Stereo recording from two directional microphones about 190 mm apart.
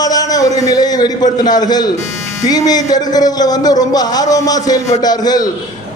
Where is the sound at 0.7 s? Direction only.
20° left (ahead or behind).